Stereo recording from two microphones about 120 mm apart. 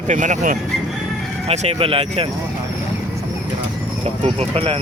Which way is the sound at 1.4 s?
65° right (ahead or behind).